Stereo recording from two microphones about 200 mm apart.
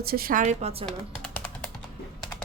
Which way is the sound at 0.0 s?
50° right (ahead or behind).